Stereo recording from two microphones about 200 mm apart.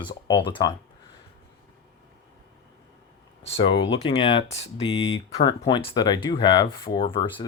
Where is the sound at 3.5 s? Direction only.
25° left (ahead or behind).